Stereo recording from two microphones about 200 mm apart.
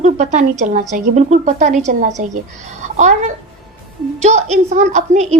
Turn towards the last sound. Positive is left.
turn(degrees=-35)  # may be behind; listen again after turning